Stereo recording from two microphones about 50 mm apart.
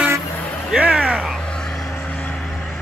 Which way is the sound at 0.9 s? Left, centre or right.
Centre.